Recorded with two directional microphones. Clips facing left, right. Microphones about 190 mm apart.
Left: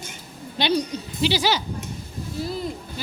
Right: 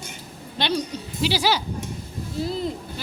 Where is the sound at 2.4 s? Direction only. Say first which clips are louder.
Right 2 dB; 25° right (ahead or behind).